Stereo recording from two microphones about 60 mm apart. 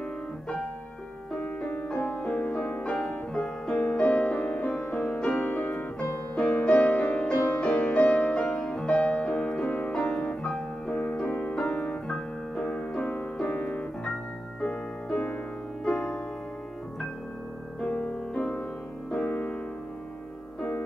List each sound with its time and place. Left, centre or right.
1.3 s music: left
5.4 s music: left
6.3 s music: centre
7.6 s music: centre
12.1 s piano: centre
13.5 s piano: left
14.6 s music: centre
17.7 s music: centre